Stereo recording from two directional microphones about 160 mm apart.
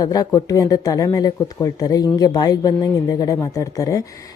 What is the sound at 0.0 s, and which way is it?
Speech, 25° left (ahead or behind).